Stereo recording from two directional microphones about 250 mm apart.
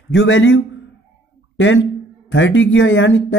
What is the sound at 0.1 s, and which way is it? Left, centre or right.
Speech, left.